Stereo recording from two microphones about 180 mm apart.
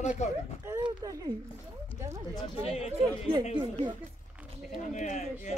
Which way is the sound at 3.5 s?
25° right (ahead or behind).